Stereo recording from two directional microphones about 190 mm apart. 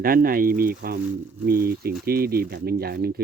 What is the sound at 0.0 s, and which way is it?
Speech, 50° right (ahead or behind).